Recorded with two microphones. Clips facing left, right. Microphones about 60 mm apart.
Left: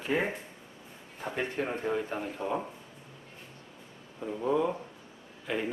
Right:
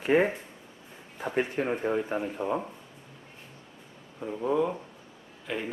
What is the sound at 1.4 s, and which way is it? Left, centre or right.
Speech, centre.